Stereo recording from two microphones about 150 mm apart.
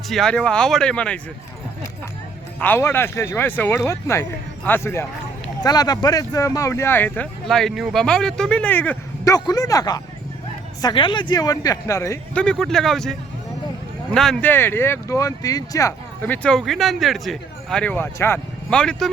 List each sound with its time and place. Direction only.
0.1 s speech: 5° left (ahead or behind)
2.6 s speech: 15° left (ahead or behind)
7.4 s speech: centre (ahead or behind)
9.2 s speech: 25° left (ahead or behind)
12.3 s speech: 5° left (ahead or behind)
14.5 s speech: 15° left (ahead or behind)
16.2 s speech: 10° left (ahead or behind)
18.7 s speech: 5° left (ahead or behind)